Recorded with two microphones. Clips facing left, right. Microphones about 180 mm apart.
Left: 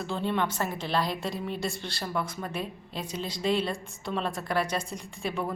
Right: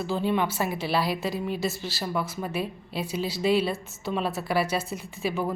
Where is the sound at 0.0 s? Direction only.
5° right (ahead or behind).